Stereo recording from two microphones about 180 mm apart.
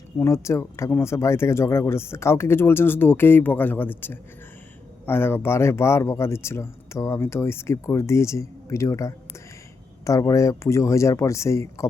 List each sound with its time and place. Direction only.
0.2 s speech: 15° left (ahead or behind)